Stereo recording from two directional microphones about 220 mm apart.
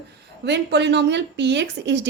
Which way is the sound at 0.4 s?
50° right (ahead or behind).